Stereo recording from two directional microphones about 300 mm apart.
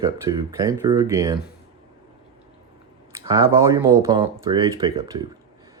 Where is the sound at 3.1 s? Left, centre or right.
Centre.